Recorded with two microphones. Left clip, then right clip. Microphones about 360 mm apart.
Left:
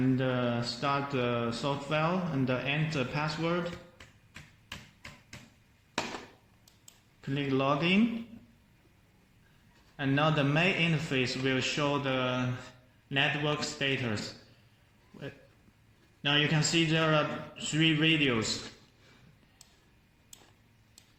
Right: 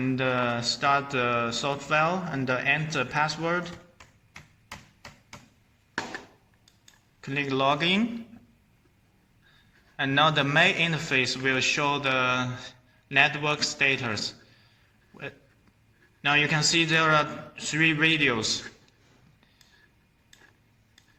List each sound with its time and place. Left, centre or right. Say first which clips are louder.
0.2 s a man's voice: right 5 dB; right
7.2 s a man's voice: right 5 dB; right
10.0 s a man's voice: right 6 dB; right
16.2 s a man's voice: right 5 dB; right